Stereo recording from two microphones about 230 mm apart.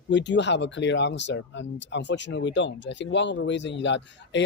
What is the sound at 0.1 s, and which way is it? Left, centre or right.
Speech, left.